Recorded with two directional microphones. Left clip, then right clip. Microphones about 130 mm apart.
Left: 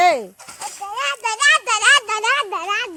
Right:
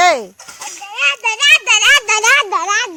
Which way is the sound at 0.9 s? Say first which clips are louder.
Right 8 dB; 20° left (ahead or behind).